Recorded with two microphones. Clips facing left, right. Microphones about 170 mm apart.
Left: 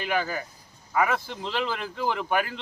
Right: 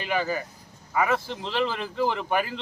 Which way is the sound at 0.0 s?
Centre (ahead or behind).